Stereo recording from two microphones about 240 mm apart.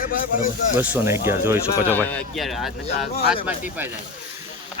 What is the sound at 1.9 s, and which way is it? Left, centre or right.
Speech, centre.